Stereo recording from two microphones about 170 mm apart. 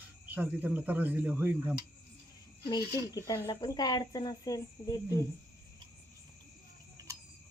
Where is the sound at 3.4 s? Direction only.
25° left (ahead or behind).